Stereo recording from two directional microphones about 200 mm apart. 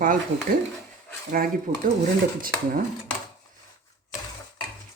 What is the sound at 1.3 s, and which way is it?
Speech, 40° right (ahead or behind).